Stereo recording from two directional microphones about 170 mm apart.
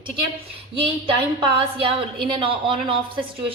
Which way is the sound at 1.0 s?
30° right (ahead or behind).